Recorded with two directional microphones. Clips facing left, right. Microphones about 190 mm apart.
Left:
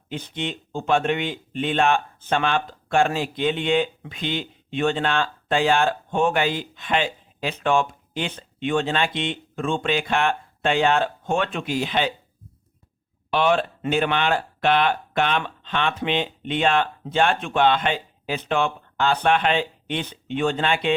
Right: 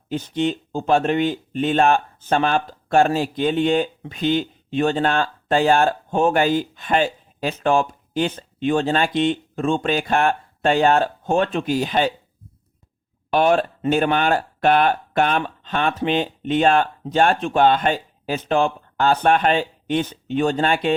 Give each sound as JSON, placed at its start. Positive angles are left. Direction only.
{"t": 0.1, "sound": "speech", "side_deg": -40}
{"t": 13.3, "sound": "speech", "side_deg": -45}